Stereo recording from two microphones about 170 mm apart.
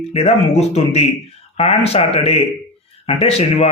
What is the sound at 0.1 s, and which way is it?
Speech, 40° left (ahead or behind).